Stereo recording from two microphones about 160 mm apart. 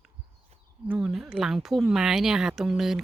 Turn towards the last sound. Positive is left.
turn(degrees=0)  # may be behind; listen again after turning